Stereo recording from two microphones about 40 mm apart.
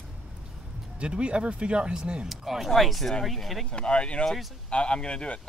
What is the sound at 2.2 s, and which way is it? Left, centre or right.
Speech, centre.